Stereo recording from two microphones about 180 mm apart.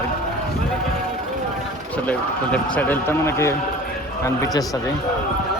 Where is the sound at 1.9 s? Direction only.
10° left (ahead or behind).